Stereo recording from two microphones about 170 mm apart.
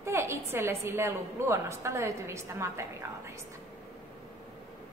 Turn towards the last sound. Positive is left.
turn(degrees=-15)  # may be behind; listen again after turning